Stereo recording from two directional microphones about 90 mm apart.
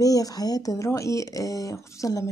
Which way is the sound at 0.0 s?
45° left (ahead or behind).